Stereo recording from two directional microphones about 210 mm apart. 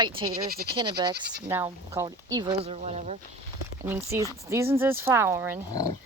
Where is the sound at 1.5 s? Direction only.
10° right (ahead or behind).